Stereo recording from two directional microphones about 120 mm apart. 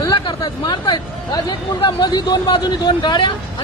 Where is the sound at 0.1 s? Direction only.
40° left (ahead or behind).